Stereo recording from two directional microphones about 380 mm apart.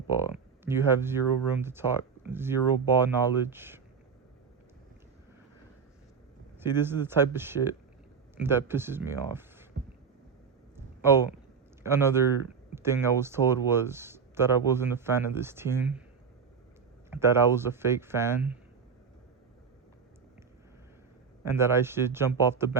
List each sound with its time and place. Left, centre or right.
0.1 s speech: centre
6.7 s speech: centre
9.7 s a sound: right
10.8 s a sound: centre
11.8 s speech: centre
17.1 s speech: centre
21.4 s speech: centre